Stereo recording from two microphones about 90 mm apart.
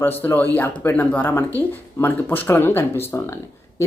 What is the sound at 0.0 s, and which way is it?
Speech, 20° left (ahead or behind).